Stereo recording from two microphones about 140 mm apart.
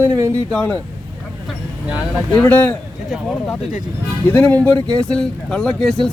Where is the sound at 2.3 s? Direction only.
10° left (ahead or behind).